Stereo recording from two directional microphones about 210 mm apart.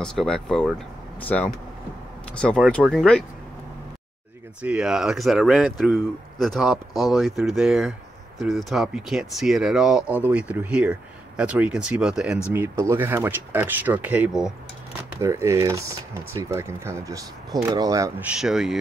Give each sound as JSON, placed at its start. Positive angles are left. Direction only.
{"t": 0.0, "sound": "speech", "side_deg": 5}
{"t": 4.6, "sound": "speech", "side_deg": -5}
{"t": 18.3, "sound": "speech", "side_deg": 0}